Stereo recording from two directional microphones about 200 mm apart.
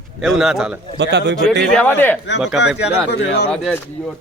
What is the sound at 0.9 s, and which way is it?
Speech, 60° right (ahead or behind).